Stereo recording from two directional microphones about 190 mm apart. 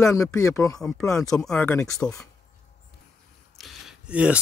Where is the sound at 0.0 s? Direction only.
15° left (ahead or behind).